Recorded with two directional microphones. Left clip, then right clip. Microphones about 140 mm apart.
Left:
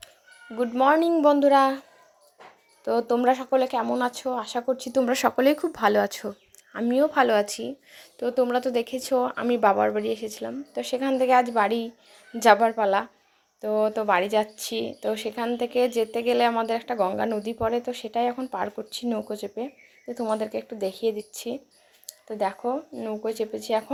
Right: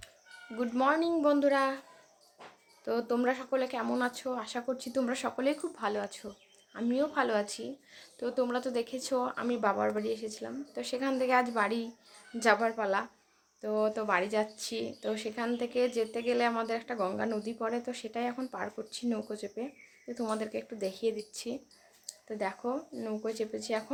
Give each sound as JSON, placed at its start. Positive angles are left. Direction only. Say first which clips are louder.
{"t": 0.5, "sound": "a woman's voice", "louder": "left 8 dB", "side_deg": 25}
{"t": 0.9, "sound": "speech", "louder": "left 8 dB", "side_deg": 45}
{"t": 1.2, "sound": "a woman's voice", "louder": "left 9 dB", "side_deg": 30}
{"t": 2.8, "sound": "a woman's voice", "louder": "left 9 dB", "side_deg": 30}
{"t": 5.1, "sound": "a woman's voice", "louder": "left 11 dB", "side_deg": 60}